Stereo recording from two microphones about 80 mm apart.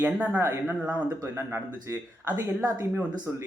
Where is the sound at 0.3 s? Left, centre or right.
Right.